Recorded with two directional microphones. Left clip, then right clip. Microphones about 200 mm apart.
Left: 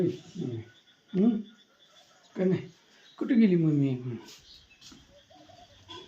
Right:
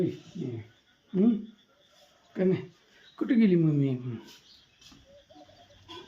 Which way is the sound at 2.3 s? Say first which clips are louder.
Right 1 dB; 5° right (ahead or behind).